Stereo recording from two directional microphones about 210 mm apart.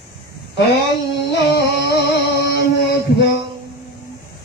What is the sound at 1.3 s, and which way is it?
Music, 50° left (ahead or behind).